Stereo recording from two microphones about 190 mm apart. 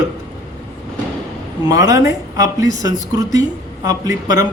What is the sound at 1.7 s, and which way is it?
A man's voice, 15° right (ahead or behind).